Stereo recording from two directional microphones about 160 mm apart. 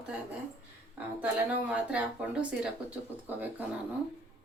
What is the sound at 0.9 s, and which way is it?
Speech, 10° right (ahead or behind).